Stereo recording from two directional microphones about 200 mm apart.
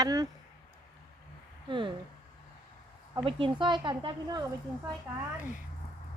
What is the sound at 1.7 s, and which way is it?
Speech, 25° right (ahead or behind).